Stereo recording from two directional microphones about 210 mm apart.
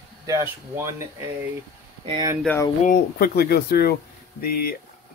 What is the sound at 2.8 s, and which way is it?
Speech, 45° left (ahead or behind).